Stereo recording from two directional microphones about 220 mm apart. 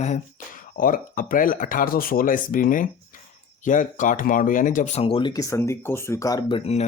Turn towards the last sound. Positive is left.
turn(degrees=30)  # may be behind; listen again after turning